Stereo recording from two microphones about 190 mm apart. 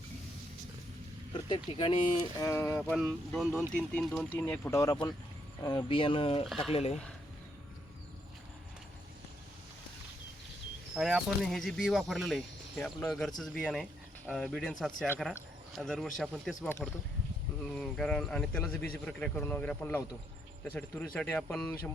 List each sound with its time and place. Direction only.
1.3 s speech: 25° left (ahead or behind)
2.4 s speech: 15° left (ahead or behind)
2.9 s speech: centre (ahead or behind); by 7.0 s 30° left (ahead or behind)
10.9 s speech: centre (ahead or behind)
17.7 s speech: 5° left (ahead or behind)